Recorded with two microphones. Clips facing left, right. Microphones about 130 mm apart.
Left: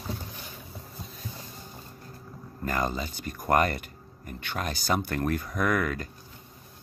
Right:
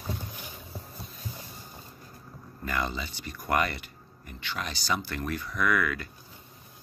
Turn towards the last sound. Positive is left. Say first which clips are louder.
# left 1 dB
turn(degrees=40)  # may be behind; listen again after turning